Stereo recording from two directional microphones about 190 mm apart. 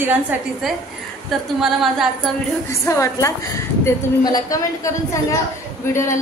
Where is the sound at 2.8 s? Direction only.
15° left (ahead or behind).